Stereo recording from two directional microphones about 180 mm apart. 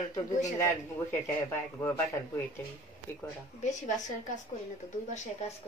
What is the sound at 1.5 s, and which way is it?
Speech, 15° left (ahead or behind).